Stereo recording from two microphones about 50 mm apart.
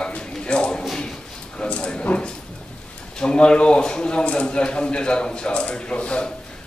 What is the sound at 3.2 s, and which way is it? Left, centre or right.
A man's voice, centre.